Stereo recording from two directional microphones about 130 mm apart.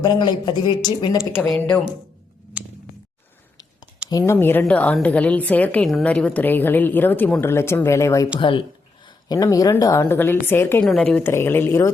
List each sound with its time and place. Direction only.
0.0 s speech: 35° left (ahead or behind)
1.4 s a woman's voice: 5° left (ahead or behind)
4.3 s a woman's voice: 15° left (ahead or behind)
8.4 s a woman's voice: 40° left (ahead or behind); by 10.8 s 15° left (ahead or behind)
10.8 s a woman's voice: 5° left (ahead or behind)
11.2 s a woman's voice: 20° left (ahead or behind)